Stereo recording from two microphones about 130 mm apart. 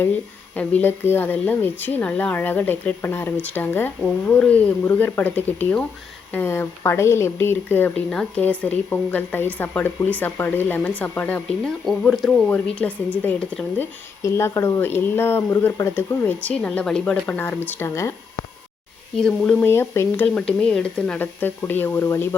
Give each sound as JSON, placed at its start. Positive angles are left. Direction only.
{"t": 0.5, "sound": "speech", "side_deg": 10}
{"t": 12.5, "sound": "speech", "side_deg": 15}
{"t": 14.2, "sound": "speech", "side_deg": 20}
{"t": 19.1, "sound": "speech", "side_deg": 5}
{"t": 19.6, "sound": "speech", "side_deg": 20}
{"t": 20.2, "sound": "speech", "side_deg": 10}